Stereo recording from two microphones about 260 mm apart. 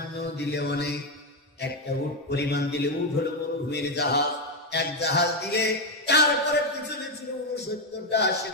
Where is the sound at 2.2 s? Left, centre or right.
Left.